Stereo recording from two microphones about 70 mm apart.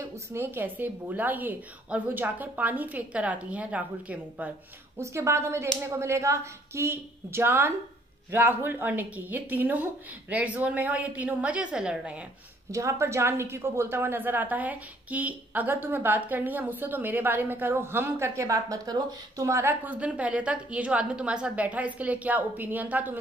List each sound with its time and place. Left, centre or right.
0.3 s a woman's voice: right
4.9 s a woman's voice: right; by 12.3 s centre
12.7 s a woman's voice: right
19.4 s a woman's voice: right
19.7 s a woman's voice: right